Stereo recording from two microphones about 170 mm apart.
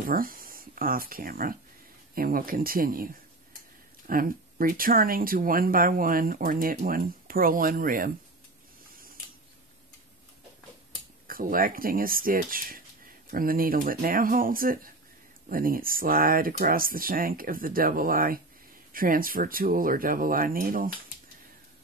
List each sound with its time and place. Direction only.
0.0 s speech: 55° right (ahead or behind)
4.1 s speech: 55° right (ahead or behind)
8.9 s a sound: 55° right (ahead or behind)
11.2 s speech: 55° right (ahead or behind)